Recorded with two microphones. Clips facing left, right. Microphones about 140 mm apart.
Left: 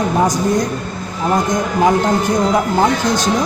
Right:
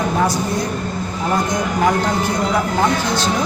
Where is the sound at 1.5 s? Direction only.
20° left (ahead or behind).